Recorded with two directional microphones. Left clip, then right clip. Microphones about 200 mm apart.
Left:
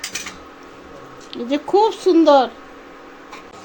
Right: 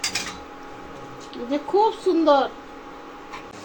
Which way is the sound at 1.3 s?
55° left (ahead or behind).